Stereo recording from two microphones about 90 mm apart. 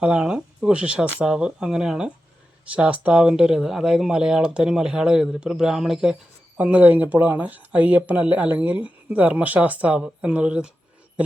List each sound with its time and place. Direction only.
0.0 s speech: 10° right (ahead or behind)